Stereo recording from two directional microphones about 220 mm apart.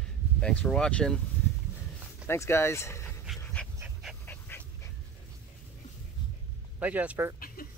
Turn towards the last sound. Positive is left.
turn(degrees=-10)  # may be behind; listen again after turning